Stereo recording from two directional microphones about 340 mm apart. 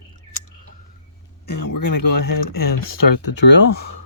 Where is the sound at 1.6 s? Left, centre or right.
Left.